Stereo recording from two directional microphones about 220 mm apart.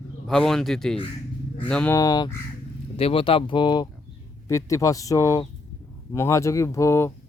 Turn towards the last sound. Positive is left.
turn(degrees=10)  # may be behind; listen again after turning